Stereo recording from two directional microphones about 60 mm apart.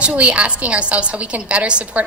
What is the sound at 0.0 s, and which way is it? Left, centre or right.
A woman's voice, right.